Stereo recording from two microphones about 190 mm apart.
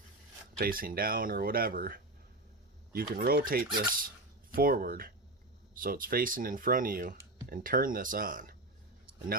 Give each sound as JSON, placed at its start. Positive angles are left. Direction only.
{"t": 0.6, "sound": "speech", "side_deg": -50}